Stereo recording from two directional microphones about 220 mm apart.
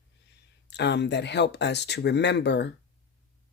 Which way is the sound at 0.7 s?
50° left (ahead or behind).